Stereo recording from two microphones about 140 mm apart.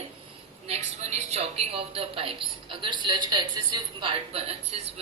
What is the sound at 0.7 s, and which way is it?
A woman's voice, 50° right (ahead or behind).